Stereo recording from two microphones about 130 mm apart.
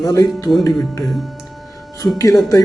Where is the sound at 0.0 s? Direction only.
25° left (ahead or behind).